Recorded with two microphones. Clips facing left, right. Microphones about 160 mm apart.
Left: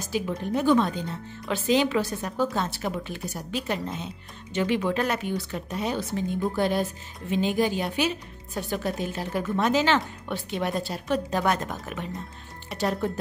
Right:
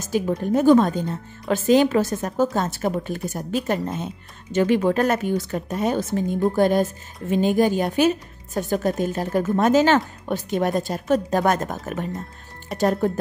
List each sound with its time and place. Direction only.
0.3 s a woman's voice: 45° right (ahead or behind)